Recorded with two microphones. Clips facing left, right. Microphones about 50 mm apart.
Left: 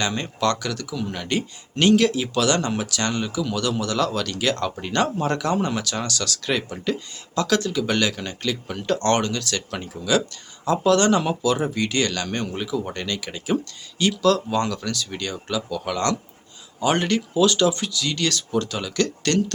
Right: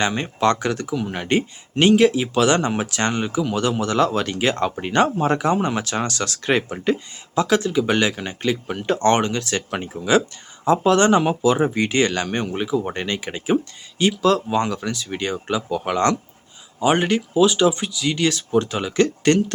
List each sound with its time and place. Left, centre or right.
0.0 s speech: right